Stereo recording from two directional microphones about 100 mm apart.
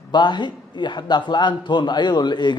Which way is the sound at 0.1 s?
50° left (ahead or behind).